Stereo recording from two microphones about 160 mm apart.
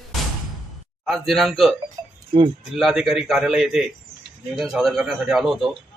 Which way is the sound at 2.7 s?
Centre (ahead or behind).